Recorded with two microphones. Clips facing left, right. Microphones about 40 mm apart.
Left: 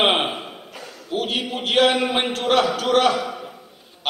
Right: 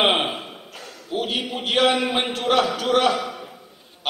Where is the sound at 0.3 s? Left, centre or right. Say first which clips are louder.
Left 1 dB; centre.